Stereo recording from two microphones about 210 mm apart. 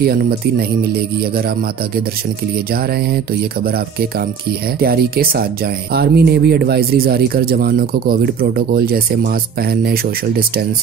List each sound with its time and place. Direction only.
0.0 s speech: 45° right (ahead or behind)
2.7 s speech: 45° right (ahead or behind)